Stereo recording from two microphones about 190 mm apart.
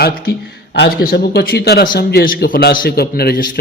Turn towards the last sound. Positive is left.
turn(degrees=50)  # may be behind; listen again after turning